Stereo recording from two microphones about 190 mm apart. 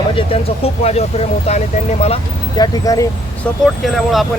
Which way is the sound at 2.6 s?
20° left (ahead or behind).